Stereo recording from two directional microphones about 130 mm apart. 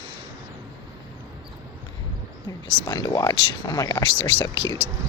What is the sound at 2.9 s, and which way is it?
Speech, 30° left (ahead or behind).